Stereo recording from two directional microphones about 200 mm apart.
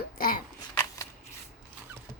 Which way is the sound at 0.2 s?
45° left (ahead or behind).